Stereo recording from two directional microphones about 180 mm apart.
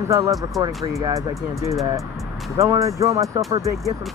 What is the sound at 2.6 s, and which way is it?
Speech, 15° right (ahead or behind).